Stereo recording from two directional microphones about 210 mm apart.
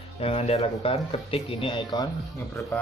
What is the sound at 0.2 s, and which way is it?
Speech, 30° left (ahead or behind).